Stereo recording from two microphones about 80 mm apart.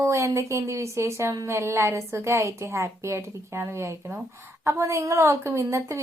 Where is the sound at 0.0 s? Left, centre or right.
Right.